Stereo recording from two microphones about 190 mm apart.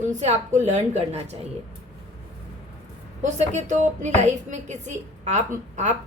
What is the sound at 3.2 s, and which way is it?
Speech, 40° right (ahead or behind).